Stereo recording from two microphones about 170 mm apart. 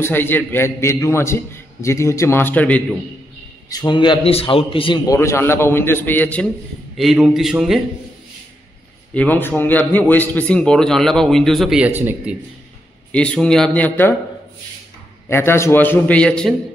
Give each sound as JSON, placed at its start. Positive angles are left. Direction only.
{"t": 0.0, "sound": "a man's voice", "side_deg": 10}
{"t": 3.7, "sound": "a man's voice", "side_deg": 25}
{"t": 7.0, "sound": "a man's voice", "side_deg": 0}
{"t": 9.1, "sound": "a man's voice", "side_deg": 10}
{"t": 13.1, "sound": "a man's voice", "side_deg": 5}
{"t": 15.2, "sound": "a man's voice", "side_deg": 15}